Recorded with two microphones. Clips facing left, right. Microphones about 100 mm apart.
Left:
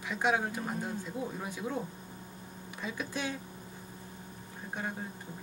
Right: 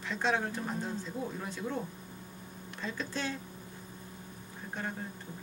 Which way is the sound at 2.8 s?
15° left (ahead or behind).